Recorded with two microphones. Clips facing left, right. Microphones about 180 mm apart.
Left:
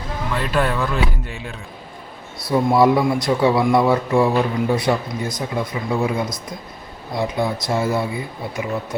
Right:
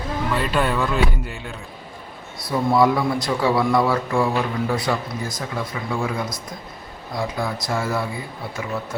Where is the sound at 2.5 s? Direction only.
25° left (ahead or behind).